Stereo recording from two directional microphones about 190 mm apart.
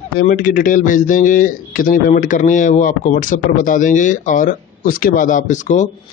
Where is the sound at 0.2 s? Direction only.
45° left (ahead or behind).